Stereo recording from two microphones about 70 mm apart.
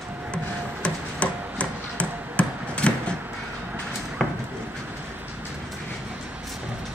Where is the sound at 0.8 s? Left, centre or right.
Centre.